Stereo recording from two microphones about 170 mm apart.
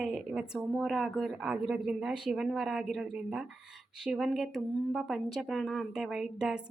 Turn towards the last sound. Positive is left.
turn(degrees=-5)  # may be behind; listen again after turning